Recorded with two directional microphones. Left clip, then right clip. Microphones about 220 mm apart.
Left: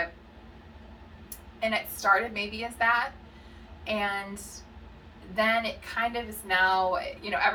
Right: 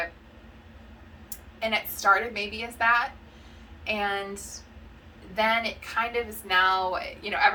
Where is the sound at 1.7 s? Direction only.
20° right (ahead or behind).